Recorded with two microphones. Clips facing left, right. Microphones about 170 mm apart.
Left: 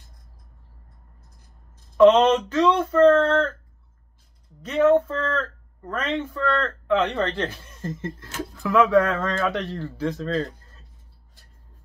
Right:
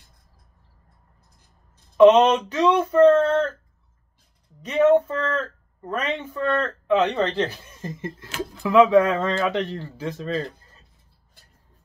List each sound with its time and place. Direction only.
2.0 s speech: 15° right (ahead or behind)
4.6 s speech: 15° right (ahead or behind)